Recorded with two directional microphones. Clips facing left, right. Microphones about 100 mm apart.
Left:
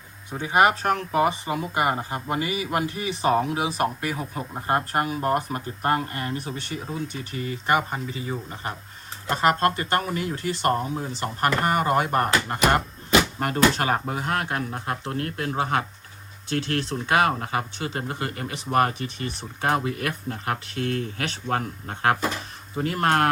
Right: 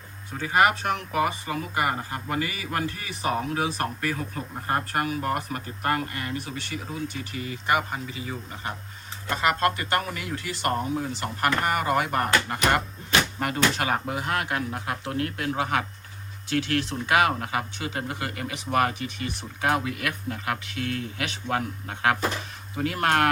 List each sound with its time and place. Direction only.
0.3 s speech: 20° left (ahead or behind)
0.7 s speech: 35° left (ahead or behind)
3.5 s speech: 10° left (ahead or behind); by 12.3 s 35° left (ahead or behind)
13.4 s speech: 40° left (ahead or behind)